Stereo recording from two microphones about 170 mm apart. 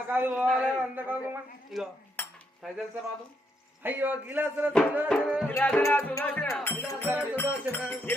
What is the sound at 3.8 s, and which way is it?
Speech, 10° right (ahead or behind).